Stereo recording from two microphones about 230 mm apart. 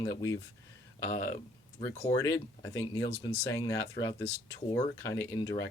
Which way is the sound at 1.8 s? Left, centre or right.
Centre.